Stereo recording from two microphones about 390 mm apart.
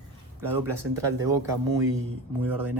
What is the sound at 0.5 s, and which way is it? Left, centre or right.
Speech, right.